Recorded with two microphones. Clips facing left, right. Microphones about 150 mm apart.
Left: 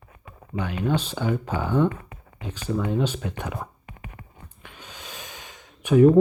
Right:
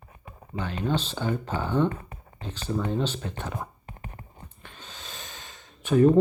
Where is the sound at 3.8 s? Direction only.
35° right (ahead or behind).